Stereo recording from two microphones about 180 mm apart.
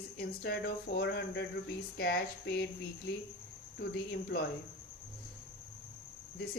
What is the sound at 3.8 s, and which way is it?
Speech, 60° left (ahead or behind).